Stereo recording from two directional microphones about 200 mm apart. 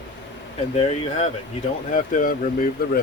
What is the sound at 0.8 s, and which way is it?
Speech, 30° left (ahead or behind).